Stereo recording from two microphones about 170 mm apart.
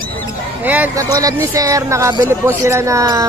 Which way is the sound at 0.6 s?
10° right (ahead or behind).